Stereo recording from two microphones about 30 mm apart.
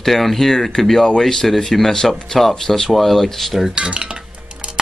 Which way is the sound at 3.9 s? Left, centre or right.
Right.